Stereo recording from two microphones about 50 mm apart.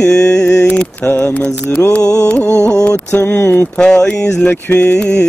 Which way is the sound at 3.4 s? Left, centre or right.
Left.